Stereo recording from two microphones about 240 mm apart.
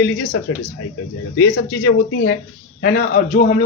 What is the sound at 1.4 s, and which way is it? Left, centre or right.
A man's voice, left.